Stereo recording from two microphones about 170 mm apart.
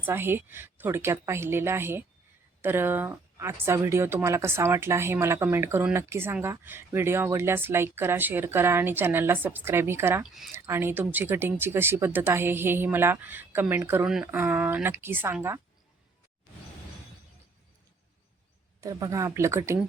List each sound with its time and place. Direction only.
0.0 s speech: 15° right (ahead or behind)
18.8 s speech: 20° right (ahead or behind)